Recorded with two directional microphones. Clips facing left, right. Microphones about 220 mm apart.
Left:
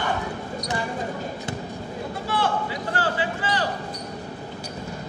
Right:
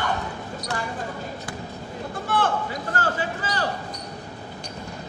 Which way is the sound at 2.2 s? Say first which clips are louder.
Right 1 dB; 50° right (ahead or behind).